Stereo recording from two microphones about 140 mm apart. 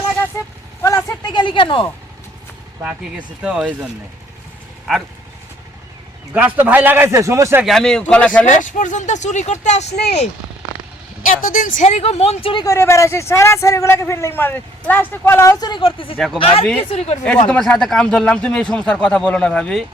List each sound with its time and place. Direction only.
0.8 s vehicle: 20° left (ahead or behind)
1.2 s speech: 35° left (ahead or behind)
2.8 s speech: 10° right (ahead or behind)
6.3 s speech: 10° right (ahead or behind)
7.6 s speech: 5° left (ahead or behind)
8.4 s speech: 65° left (ahead or behind)
11.3 s a woman's voice: 75° left (ahead or behind); by 12.6 s 40° left (ahead or behind)
12.6 s a man's voice: 20° left (ahead or behind); by 16.1 s 40° left (ahead or behind)
16.1 s speech: centre (ahead or behind)
16.4 s a woman's voice: 45° left (ahead or behind)
17.5 s speech: 5° left (ahead or behind)